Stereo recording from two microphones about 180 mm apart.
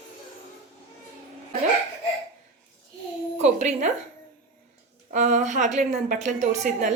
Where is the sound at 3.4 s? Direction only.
40° right (ahead or behind).